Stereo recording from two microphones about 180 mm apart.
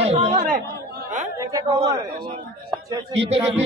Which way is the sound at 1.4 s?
20° right (ahead or behind).